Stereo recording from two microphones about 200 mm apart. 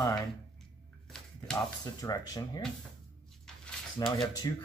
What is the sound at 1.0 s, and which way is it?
Shuffling cards, centre (ahead or behind).